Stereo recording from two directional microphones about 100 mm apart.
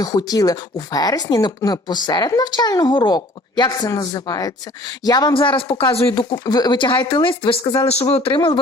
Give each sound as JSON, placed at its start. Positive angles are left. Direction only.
{"t": 0.0, "sound": "speech", "side_deg": 40}
{"t": 5.3, "sound": "speech", "side_deg": 60}
{"t": 5.7, "sound": "speech", "side_deg": 75}
{"t": 6.3, "sound": "speech", "side_deg": 45}
{"t": 8.1, "sound": "speech", "side_deg": 75}